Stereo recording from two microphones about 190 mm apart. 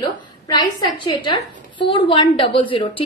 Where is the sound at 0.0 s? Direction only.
20° left (ahead or behind).